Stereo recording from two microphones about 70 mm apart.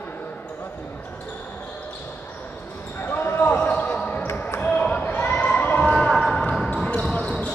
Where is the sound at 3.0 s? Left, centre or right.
Left.